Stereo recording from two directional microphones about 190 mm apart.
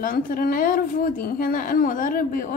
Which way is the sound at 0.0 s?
50° left (ahead or behind).